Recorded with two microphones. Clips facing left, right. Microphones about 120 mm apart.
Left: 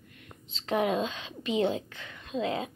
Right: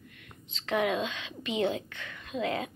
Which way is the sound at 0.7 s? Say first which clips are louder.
Left 1 dB; 35° left (ahead or behind).